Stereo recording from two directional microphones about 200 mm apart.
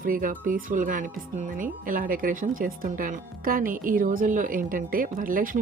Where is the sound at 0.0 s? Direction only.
45° right (ahead or behind).